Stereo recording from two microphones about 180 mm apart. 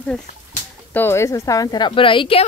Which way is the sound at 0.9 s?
15° left (ahead or behind).